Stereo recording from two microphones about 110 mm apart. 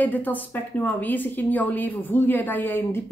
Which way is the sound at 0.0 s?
15° left (ahead or behind).